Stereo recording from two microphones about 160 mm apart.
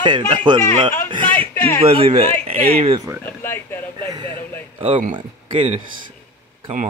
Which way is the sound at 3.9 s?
30° right (ahead or behind).